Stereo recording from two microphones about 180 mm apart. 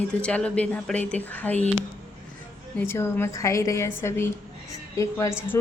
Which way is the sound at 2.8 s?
15° left (ahead or behind).